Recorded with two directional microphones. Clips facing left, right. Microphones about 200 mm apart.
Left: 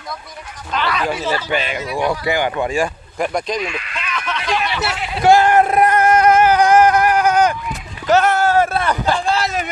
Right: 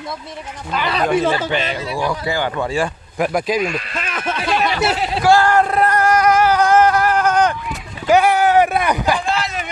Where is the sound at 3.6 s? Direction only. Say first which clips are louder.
Right 3 dB; 40° right (ahead or behind).